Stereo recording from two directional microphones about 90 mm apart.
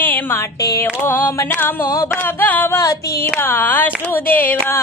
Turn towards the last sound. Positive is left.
turn(degrees=20)  # may be behind; listen again after turning